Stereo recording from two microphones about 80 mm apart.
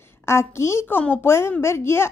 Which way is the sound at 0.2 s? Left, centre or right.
Left.